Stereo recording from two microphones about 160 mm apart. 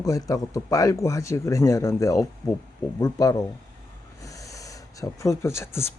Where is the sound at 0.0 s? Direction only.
20° left (ahead or behind).